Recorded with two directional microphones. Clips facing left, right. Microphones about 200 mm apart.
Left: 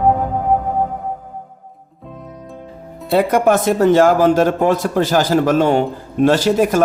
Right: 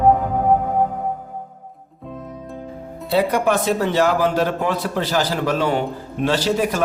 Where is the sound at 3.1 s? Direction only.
50° left (ahead or behind).